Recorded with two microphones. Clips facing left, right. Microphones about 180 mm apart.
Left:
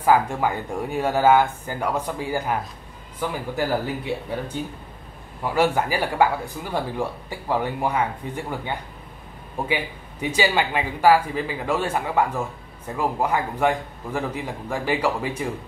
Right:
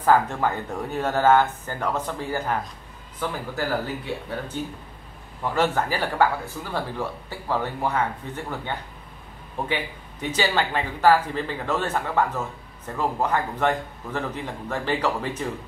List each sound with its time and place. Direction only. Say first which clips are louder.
0.0 s speech: left 1 dB; 10° left (ahead or behind)
5.4 s speech: left 2 dB; 10° left (ahead or behind)